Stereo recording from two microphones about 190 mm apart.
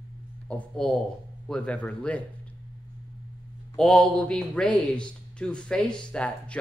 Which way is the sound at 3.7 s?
5° left (ahead or behind).